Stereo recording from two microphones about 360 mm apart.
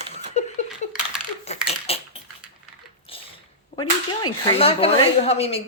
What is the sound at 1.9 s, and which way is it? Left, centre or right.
Bathtub, centre.